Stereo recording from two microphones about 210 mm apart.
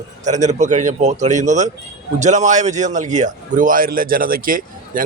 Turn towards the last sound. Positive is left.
turn(degrees=-40)  # may be behind; listen again after turning